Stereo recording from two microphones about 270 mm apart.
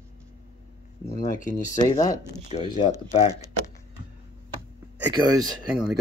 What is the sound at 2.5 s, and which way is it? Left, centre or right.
Speech, left.